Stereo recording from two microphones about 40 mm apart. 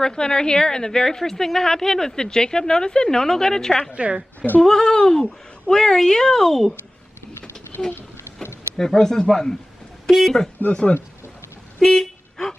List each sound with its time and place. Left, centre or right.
0.0 s a woman's voice: left
3.9 s a woman's voice: right
4.6 s a woman's voice: centre
7.9 s a sound: left
8.7 s a woman's voice: centre
10.7 s speech: left
11.8 s toot: centre